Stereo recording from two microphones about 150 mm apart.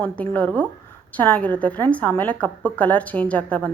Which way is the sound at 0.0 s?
10° left (ahead or behind).